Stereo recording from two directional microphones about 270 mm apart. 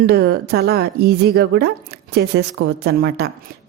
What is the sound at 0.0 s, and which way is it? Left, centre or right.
A woman's voice, right.